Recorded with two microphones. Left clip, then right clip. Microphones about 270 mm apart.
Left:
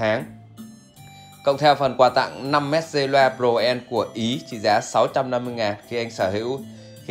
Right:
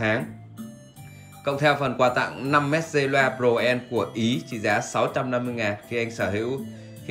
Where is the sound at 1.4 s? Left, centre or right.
Centre.